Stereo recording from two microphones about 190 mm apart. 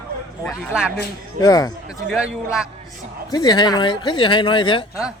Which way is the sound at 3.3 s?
20° left (ahead or behind).